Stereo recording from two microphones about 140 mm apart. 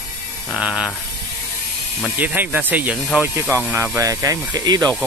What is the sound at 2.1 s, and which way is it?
Speech, 15° right (ahead or behind).